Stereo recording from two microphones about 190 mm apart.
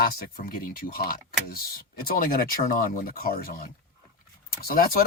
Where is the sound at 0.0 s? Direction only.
50° left (ahead or behind).